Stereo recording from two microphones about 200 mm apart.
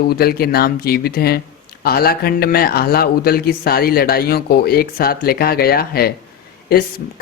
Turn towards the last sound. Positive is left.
turn(degrees=50)  # may be behind; listen again after turning